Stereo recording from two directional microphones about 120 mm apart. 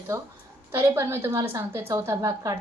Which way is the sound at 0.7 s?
20° right (ahead or behind).